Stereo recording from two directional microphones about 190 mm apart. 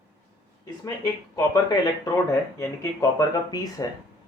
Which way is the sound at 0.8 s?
20° left (ahead or behind).